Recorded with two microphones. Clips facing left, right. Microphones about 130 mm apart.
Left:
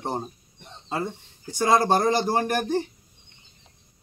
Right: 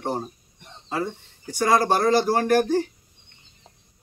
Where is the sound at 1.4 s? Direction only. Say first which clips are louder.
Even; 25° left (ahead or behind).